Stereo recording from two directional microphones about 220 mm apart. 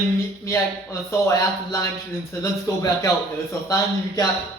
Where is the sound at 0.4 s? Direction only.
15° left (ahead or behind).